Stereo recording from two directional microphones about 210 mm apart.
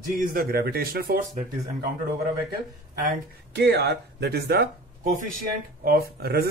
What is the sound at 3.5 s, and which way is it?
Speech, 50° right (ahead or behind).